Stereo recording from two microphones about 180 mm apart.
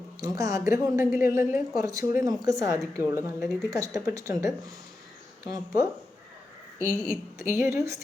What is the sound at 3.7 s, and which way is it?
Speech, 20° right (ahead or behind).